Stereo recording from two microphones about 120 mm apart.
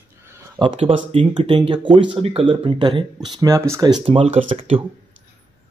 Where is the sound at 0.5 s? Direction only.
45° right (ahead or behind).